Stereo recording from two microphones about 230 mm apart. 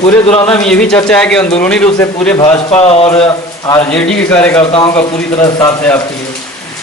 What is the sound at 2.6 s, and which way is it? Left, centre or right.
Speech, left.